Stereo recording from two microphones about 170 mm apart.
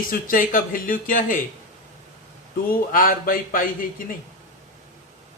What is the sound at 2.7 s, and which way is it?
Speech, 55° left (ahead or behind).